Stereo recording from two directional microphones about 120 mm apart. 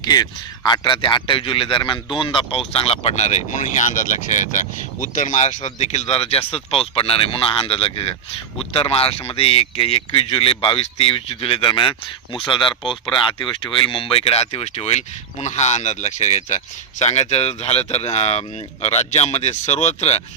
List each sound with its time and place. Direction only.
0.0 s speech: 35° left (ahead or behind)
2.7 s speech: 55° left (ahead or behind)